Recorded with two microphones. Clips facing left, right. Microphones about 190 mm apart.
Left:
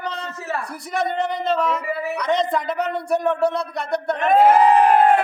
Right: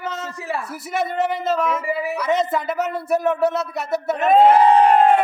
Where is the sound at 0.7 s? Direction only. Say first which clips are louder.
Left 2 dB; 5° right (ahead or behind).